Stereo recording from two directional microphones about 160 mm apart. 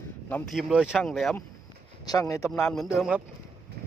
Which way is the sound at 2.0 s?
20° left (ahead or behind).